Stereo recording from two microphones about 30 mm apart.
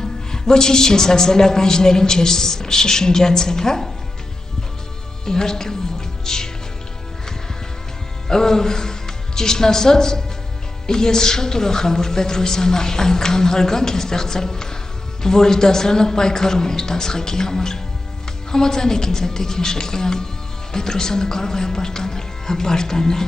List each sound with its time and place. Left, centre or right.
0.3 s a woman's voice: left
5.2 s a woman's voice: centre
8.3 s a woman's voice: centre